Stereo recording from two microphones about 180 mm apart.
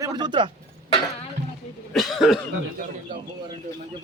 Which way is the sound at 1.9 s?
Centre (ahead or behind).